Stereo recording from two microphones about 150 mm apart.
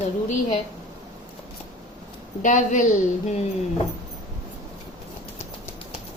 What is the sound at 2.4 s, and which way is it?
Speech, 55° left (ahead or behind).